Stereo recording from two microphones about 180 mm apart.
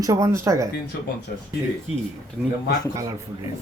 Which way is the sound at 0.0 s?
15° right (ahead or behind).